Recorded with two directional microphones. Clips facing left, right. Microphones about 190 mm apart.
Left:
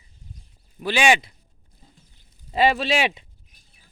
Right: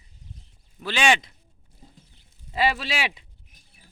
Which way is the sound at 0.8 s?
10° left (ahead or behind).